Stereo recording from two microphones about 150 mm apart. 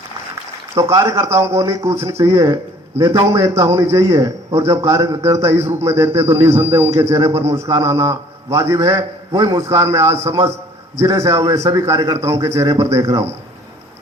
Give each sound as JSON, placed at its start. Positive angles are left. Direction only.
{"t": 0.8, "sound": "a man's voice", "side_deg": -20}